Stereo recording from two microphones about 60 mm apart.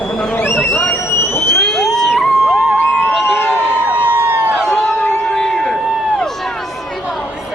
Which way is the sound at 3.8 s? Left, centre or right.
Right.